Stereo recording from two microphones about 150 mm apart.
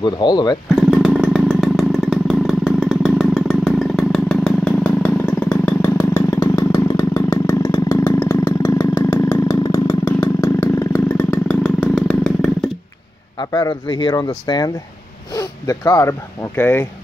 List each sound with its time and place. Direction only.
0.0 s speech: 30° left (ahead or behind)
0.7 s motorcycle: 5° right (ahead or behind)
13.4 s speech: 25° left (ahead or behind)